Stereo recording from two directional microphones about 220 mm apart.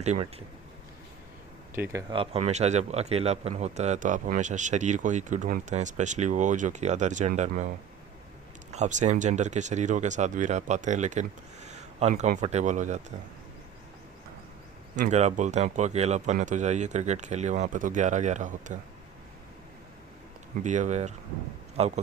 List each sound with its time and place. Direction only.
0.0 s speech: 30° right (ahead or behind)
1.7 s speech: 10° right (ahead or behind); by 7.7 s 30° right (ahead or behind)
8.7 s speech: 30° right (ahead or behind)
14.9 s speech: 35° right (ahead or behind)
20.7 s speech: 35° right (ahead or behind)